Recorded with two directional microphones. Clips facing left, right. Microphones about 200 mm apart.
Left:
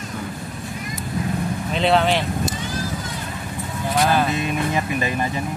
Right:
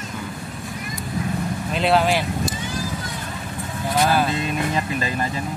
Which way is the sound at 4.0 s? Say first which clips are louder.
Even; 5° right (ahead or behind).